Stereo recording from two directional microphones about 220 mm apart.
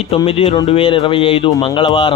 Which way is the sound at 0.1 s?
25° left (ahead or behind).